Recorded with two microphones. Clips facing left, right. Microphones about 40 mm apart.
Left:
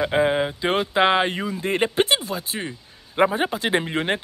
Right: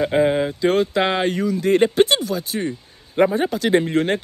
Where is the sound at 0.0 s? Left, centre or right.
Centre.